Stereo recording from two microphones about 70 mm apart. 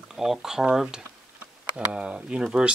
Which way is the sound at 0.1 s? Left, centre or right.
Centre.